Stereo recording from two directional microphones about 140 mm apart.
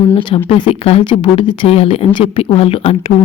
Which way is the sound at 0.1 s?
40° left (ahead or behind).